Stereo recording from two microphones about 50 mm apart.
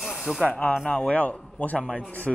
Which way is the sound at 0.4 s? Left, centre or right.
Left.